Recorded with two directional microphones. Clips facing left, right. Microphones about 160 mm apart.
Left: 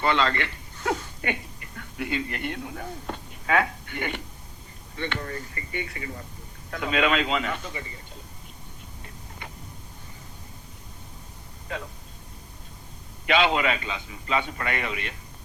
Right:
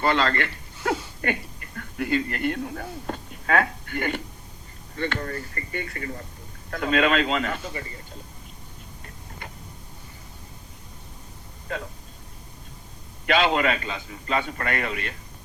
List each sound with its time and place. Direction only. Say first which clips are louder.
0.0 s speech: right 1 dB; 45° right (ahead or behind)
4.9 s a man's voice: right 3 dB; 40° right (ahead or behind)
13.2 s a man's voice: right 1 dB; 40° right (ahead or behind)